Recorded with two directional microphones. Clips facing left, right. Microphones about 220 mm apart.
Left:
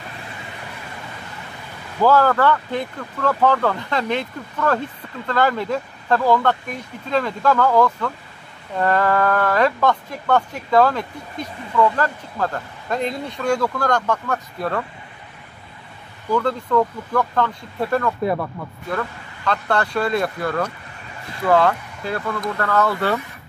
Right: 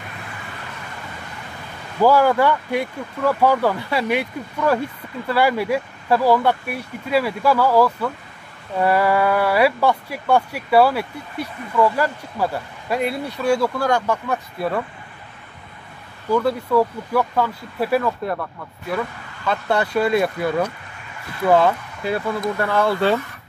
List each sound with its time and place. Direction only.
2.0 s speech: 10° right (ahead or behind)
16.3 s speech: 10° right (ahead or behind)
21.6 s speech: 10° right (ahead or behind)